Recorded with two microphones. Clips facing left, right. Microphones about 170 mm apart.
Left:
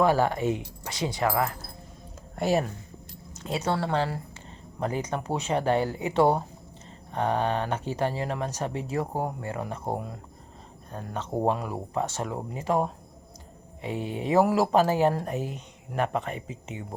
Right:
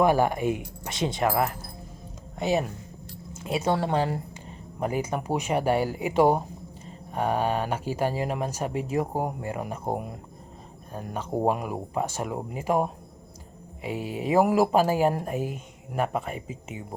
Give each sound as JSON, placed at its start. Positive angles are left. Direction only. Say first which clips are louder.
{"t": 0.0, "sound": "speech", "louder": "right 1 dB", "side_deg": -15}
{"t": 0.9, "sound": "speech", "louder": "right 2 dB", "side_deg": -25}
{"t": 2.3, "sound": "speech", "louder": "even", "side_deg": 0}
{"t": 3.3, "sound": "speech", "louder": "right 2 dB", "side_deg": -10}
{"t": 16.7, "sound": "speech", "louder": "left 1 dB", "side_deg": 20}